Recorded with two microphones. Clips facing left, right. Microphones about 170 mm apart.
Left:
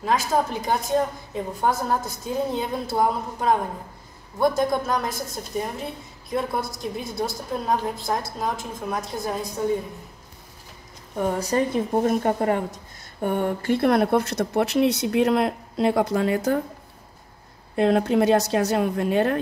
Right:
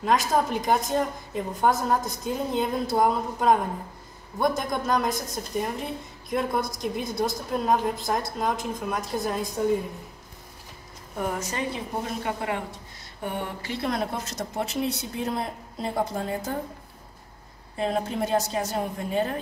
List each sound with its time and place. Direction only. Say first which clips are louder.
0.0 s a woman's voice: even; centre (ahead or behind)
11.2 s a woman's voice: left 7 dB; 35° left (ahead or behind); by 16.5 s 75° left (ahead or behind)
17.7 s a woman's voice: left 8 dB; 75° left (ahead or behind)